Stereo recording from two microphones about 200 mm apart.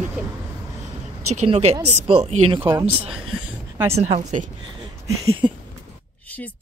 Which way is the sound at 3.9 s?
35° right (ahead or behind).